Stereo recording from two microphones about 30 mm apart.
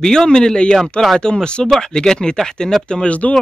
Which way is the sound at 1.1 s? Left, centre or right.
Left.